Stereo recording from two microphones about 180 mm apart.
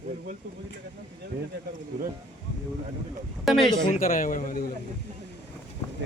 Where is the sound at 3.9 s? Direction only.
50° left (ahead or behind).